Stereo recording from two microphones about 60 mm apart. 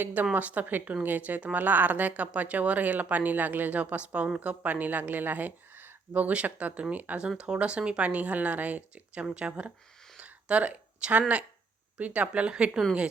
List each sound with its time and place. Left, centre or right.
0.0 s speech: right
10.2 s a sound: right
11.9 s speech: right